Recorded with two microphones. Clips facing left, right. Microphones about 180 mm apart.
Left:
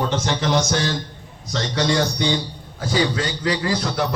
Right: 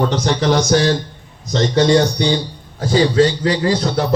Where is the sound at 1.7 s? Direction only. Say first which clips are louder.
Right 7 dB; 30° right (ahead or behind).